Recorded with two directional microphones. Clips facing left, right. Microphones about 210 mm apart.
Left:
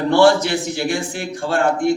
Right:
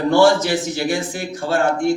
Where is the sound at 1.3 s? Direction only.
Centre (ahead or behind).